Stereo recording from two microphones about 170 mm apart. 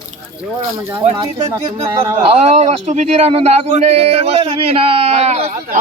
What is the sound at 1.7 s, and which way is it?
A man's voice, 30° right (ahead or behind).